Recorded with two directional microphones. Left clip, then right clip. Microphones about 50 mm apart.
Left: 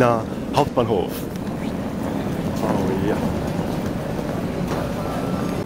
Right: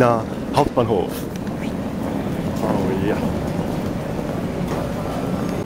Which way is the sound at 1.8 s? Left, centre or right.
Centre.